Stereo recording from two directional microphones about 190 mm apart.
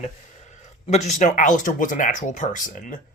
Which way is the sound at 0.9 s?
40° left (ahead or behind).